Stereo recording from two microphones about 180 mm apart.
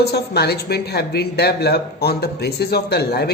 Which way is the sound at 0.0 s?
65° left (ahead or behind).